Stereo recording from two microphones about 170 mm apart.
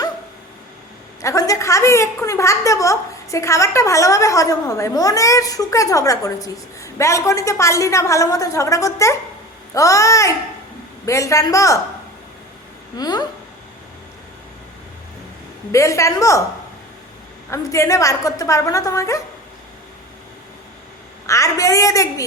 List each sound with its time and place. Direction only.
1.2 s a woman's voice: 20° left (ahead or behind)
13.0 s a woman's voice: 25° left (ahead or behind)
15.7 s a woman's voice: 20° left (ahead or behind)
17.5 s a woman's voice: 20° left (ahead or behind)
21.2 s a woman's voice: 20° left (ahead or behind)